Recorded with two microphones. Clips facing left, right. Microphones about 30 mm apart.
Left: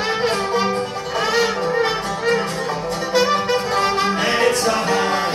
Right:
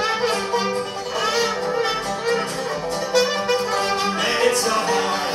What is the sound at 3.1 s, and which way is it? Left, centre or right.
Music, centre.